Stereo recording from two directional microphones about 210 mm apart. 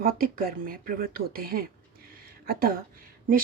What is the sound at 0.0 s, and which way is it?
Speech, 45° right (ahead or behind).